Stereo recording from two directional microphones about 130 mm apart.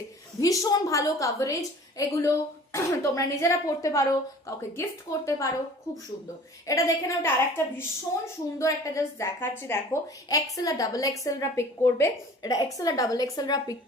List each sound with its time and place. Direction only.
0.3 s a woman's voice: 25° left (ahead or behind)
6.7 s a woman's voice: 25° left (ahead or behind)